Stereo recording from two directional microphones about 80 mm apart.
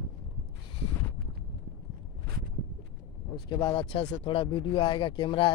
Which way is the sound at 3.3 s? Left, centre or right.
Left.